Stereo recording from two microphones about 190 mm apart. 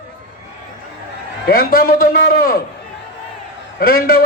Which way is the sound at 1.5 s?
50° left (ahead or behind).